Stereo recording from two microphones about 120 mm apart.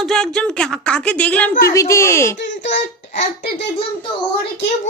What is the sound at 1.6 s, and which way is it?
Speech, 25° left (ahead or behind).